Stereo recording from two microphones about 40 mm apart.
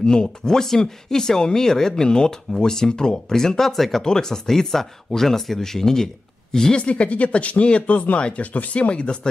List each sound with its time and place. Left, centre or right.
0.0 s speech: centre
4.0 s speech: centre
6.8 s speech: left